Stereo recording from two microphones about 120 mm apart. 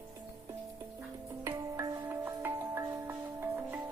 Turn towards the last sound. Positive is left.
turn(degrees=-20)  # may be behind; listen again after turning